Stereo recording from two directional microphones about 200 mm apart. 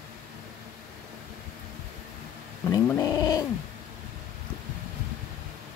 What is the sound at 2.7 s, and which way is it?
Cat, 15° left (ahead or behind).